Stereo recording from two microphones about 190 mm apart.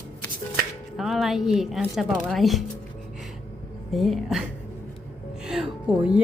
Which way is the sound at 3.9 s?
Centre (ahead or behind).